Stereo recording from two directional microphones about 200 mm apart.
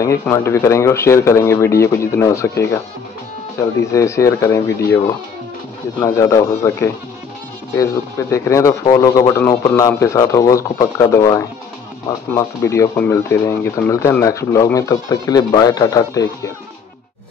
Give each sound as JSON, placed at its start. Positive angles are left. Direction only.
{"t": 0.0, "sound": "speech", "side_deg": 15}
{"t": 3.8, "sound": "speech", "side_deg": 15}